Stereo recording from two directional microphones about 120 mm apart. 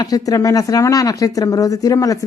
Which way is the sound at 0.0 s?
30° left (ahead or behind).